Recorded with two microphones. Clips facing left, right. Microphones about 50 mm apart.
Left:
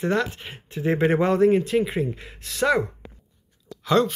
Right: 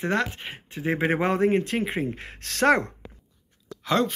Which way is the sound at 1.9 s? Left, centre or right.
Right.